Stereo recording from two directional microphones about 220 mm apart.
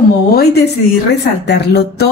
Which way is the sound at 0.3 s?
45° left (ahead or behind).